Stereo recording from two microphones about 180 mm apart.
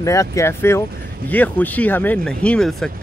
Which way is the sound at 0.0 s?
15° left (ahead or behind).